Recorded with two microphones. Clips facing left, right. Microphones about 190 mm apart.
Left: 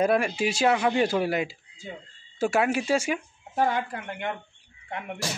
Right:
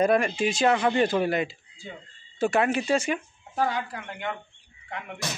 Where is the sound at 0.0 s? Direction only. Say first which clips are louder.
Right 1 dB; 5° left (ahead or behind).